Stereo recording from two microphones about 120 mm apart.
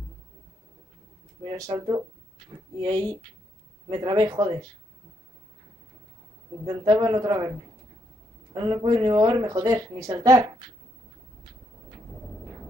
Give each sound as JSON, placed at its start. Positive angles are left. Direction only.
{"t": 1.4, "sound": "speech", "side_deg": -30}
{"t": 6.6, "sound": "speech", "side_deg": -30}
{"t": 8.5, "sound": "speech", "side_deg": -35}